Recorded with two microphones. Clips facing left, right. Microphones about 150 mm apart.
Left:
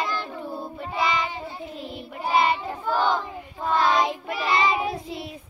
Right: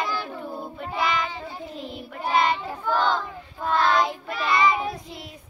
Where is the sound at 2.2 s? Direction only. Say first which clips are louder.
Left 1 dB; 5° left (ahead or behind).